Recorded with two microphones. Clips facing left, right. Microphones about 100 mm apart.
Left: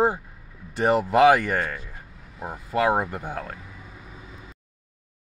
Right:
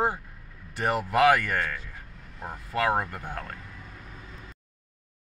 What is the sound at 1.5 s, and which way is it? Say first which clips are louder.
Vehicle: left 3 dB; 15° left (ahead or behind).